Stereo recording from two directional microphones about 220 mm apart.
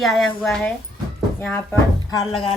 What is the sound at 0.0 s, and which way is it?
A woman's voice, centre (ahead or behind).